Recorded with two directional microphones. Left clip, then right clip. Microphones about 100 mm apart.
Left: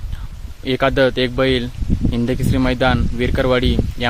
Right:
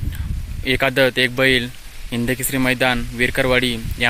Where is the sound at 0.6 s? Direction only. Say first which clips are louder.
Left 1 dB; 10° left (ahead or behind).